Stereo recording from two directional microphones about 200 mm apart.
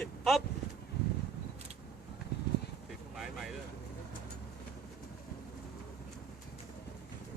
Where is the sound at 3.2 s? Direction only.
Centre (ahead or behind).